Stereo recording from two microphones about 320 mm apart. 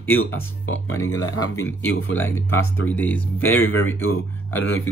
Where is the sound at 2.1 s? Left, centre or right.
Centre.